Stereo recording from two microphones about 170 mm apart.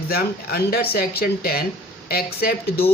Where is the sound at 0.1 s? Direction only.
65° left (ahead or behind).